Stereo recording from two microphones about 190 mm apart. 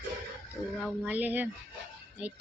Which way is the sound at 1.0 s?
10° right (ahead or behind).